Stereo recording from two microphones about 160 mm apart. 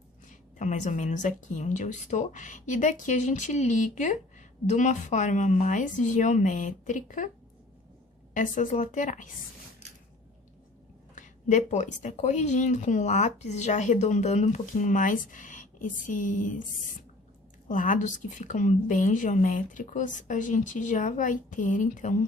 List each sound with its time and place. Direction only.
0.3 s speech: 50° left (ahead or behind)
8.3 s speech: 55° left (ahead or behind)
11.1 s speech: 50° left (ahead or behind)
17.7 s speech: 55° left (ahead or behind)